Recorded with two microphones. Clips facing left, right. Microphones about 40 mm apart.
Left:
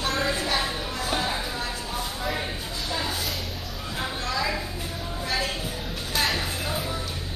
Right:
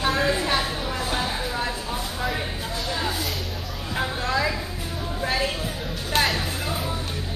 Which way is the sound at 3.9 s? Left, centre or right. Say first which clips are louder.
Right 4 dB; right.